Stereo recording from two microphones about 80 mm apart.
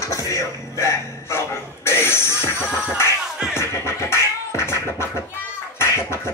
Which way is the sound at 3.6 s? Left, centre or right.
Left.